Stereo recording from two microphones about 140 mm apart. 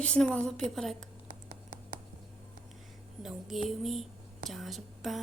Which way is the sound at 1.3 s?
65° right (ahead or behind).